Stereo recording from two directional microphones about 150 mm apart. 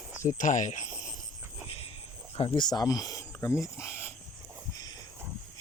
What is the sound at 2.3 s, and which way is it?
Speech, 35° left (ahead or behind).